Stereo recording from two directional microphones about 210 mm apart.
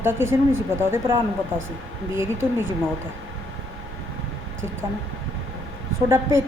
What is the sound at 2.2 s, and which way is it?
Speech, 10° right (ahead or behind).